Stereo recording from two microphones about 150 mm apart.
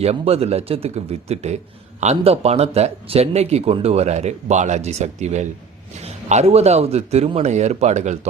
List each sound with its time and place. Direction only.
0.0 s speech: 45° right (ahead or behind)